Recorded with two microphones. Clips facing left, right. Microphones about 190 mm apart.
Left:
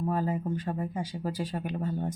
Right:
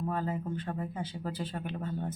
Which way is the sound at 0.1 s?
10° left (ahead or behind).